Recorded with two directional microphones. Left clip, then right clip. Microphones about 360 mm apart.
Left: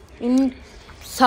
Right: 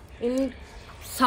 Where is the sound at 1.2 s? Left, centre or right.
Centre.